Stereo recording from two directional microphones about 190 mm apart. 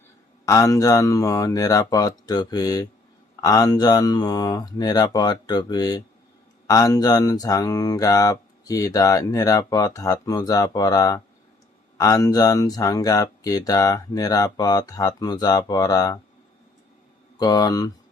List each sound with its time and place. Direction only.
0.4 s speech: 15° left (ahead or behind)
17.4 s speech: 20° left (ahead or behind)